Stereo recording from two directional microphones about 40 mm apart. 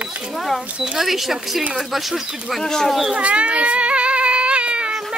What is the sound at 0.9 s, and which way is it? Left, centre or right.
Speech, centre.